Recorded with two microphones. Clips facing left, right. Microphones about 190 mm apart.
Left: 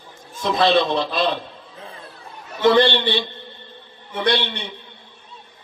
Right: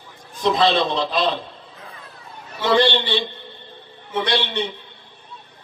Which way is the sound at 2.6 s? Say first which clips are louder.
Left 2 dB; 55° left (ahead or behind).